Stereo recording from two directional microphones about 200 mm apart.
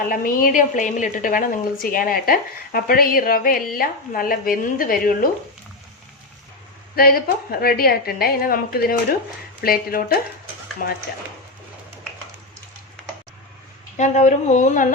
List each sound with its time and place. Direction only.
0.1 s a woman's voice: 45° left (ahead or behind)
6.9 s a woman's voice: 50° left (ahead or behind)
13.9 s speech: 35° left (ahead or behind)